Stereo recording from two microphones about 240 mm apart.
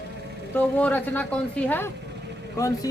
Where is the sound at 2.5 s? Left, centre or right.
Centre.